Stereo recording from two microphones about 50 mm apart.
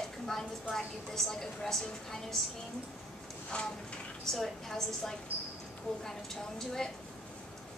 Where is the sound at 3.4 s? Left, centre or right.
Left.